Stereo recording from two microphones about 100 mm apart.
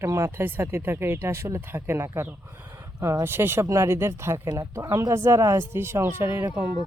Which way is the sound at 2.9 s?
40° right (ahead or behind).